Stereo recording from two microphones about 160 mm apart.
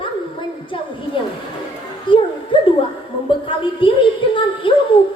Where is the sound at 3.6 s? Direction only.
30° left (ahead or behind).